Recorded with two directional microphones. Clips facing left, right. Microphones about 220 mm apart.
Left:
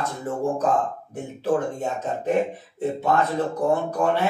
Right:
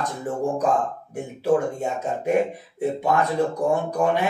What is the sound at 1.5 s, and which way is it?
Speech, 10° right (ahead or behind).